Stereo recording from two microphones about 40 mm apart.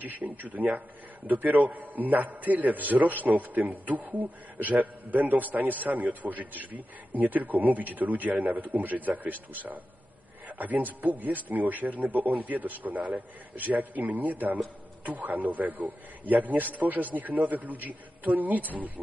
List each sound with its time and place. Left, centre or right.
0.0 s a man's voice: right